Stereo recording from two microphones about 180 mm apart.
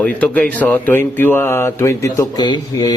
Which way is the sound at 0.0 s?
5° left (ahead or behind).